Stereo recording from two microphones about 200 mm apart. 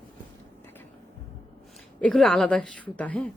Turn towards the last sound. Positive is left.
turn(degrees=5)  # may be behind; listen again after turning